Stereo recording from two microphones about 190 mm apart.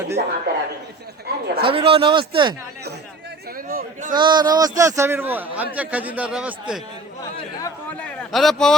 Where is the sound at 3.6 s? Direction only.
50° right (ahead or behind).